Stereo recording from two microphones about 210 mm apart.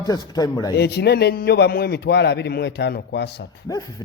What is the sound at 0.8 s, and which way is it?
A man's voice, 50° left (ahead or behind).